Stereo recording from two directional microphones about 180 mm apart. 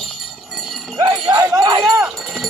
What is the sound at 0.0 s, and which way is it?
Jingle bell, centre (ahead or behind).